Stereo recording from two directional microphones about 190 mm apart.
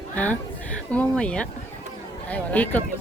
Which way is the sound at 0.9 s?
5° left (ahead or behind).